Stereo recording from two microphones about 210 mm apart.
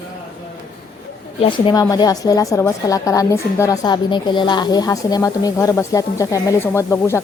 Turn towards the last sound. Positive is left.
turn(degrees=10)  # may be behind; listen again after turning